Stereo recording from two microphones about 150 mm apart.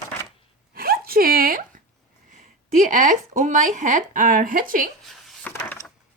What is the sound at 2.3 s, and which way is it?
Speech, 55° right (ahead or behind).